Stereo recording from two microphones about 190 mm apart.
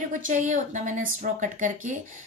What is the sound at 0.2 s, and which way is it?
A woman's voice, 40° right (ahead or behind).